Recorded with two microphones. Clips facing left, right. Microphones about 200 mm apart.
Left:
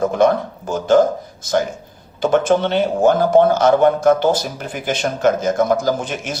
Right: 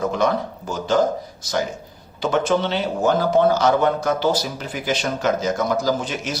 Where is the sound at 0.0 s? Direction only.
50° left (ahead or behind).